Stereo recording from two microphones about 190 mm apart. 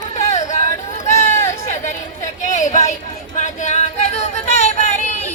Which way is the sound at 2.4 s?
40° left (ahead or behind).